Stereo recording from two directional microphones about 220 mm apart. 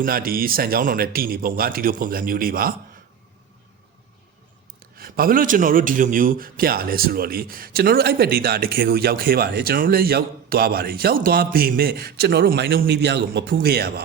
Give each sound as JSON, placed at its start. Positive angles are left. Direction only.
{"t": 0.0, "sound": "speech", "side_deg": -40}
{"t": 4.8, "sound": "a man's voice", "side_deg": -40}